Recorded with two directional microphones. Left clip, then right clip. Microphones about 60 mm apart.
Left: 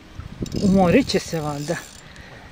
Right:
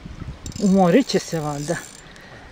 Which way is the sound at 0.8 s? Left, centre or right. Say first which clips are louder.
Right 1 dB; right.